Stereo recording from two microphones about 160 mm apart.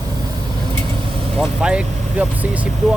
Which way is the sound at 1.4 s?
5° right (ahead or behind).